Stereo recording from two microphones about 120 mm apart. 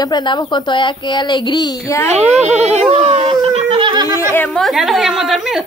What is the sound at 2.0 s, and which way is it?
Speech, 70° right (ahead or behind).